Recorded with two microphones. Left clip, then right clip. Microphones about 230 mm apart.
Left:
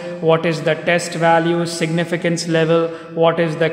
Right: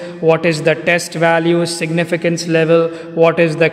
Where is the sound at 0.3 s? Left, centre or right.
Right.